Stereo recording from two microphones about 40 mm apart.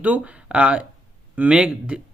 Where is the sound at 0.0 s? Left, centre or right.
Right.